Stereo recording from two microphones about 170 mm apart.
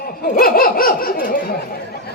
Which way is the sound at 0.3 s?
60° left (ahead or behind).